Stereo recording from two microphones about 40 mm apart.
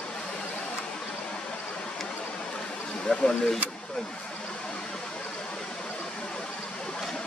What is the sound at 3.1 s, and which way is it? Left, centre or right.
Speech, centre.